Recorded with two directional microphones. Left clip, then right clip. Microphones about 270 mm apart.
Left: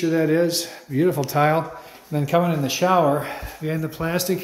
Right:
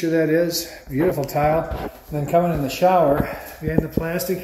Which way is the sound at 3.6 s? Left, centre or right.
Centre.